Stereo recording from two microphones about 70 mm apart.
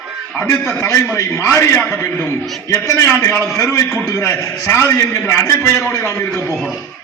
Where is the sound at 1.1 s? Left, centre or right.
Left.